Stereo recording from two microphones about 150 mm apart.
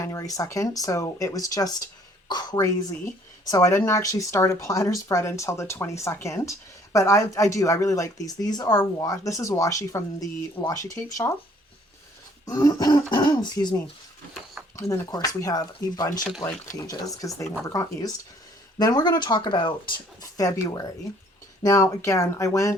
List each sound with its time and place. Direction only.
0.0 s speech: 20° left (ahead or behind)
12.5 s speech: 25° left (ahead or behind)